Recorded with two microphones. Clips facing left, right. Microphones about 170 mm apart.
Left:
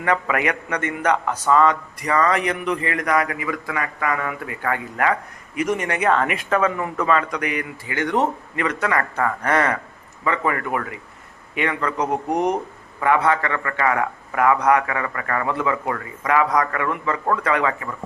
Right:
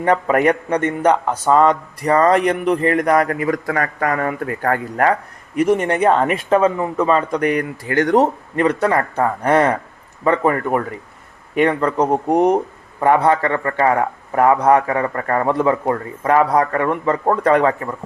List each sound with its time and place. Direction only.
0.0 s a man's voice: 40° right (ahead or behind)